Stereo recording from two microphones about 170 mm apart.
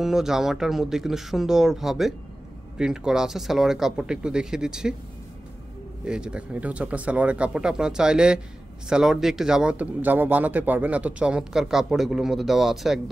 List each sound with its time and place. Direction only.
0.0 s speech: 5° right (ahead or behind)
6.0 s speech: 5° right (ahead or behind)